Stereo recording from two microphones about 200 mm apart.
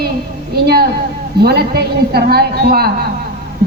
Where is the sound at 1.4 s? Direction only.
50° right (ahead or behind).